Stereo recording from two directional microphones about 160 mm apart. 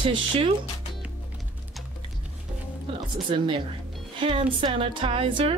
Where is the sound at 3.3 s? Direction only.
30° right (ahead or behind).